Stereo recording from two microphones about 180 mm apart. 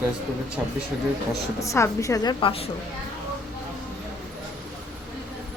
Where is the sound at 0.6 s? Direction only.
15° right (ahead or behind).